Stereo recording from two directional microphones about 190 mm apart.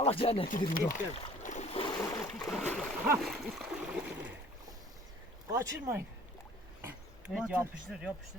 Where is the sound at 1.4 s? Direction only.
40° left (ahead or behind).